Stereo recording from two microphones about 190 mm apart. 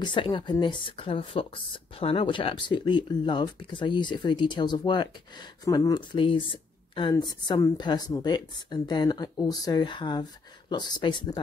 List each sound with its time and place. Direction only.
0.0 s speech: 25° left (ahead or behind)